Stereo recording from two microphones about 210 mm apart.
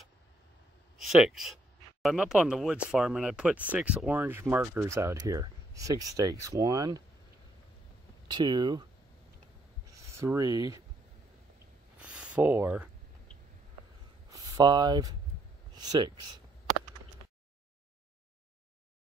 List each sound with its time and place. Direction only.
0.9 s speech: centre (ahead or behind); by 7.0 s 15° right (ahead or behind)
8.3 s speech: 20° right (ahead or behind)
9.9 s speech: 15° right (ahead or behind)
12.0 s a sound: 5° right (ahead or behind)
14.3 s speech: 15° right (ahead or behind)